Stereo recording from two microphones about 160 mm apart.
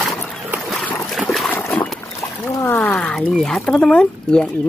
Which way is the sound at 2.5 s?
15° left (ahead or behind).